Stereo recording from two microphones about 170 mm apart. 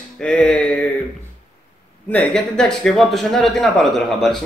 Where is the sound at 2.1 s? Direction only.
5° left (ahead or behind).